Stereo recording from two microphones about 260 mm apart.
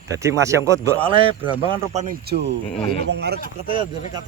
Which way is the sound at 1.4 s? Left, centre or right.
Centre.